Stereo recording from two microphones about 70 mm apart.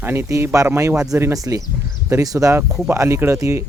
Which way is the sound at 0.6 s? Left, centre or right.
Right.